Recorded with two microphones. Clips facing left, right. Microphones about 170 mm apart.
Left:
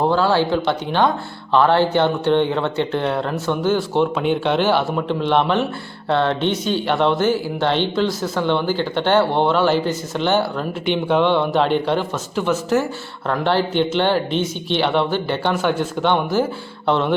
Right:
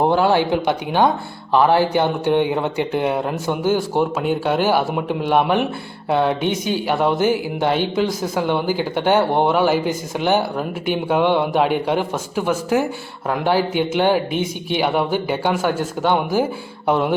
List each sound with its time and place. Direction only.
0.0 s speech: 20° right (ahead or behind)